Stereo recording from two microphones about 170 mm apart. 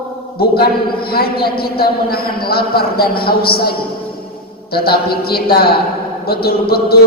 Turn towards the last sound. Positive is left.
turn(degrees=65)  # may be behind; listen again after turning